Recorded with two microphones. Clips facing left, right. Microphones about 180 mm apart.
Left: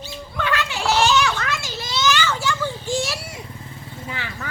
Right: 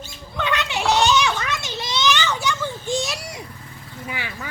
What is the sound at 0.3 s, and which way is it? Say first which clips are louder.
Children playing: right 1 dB; 20° right (ahead or behind).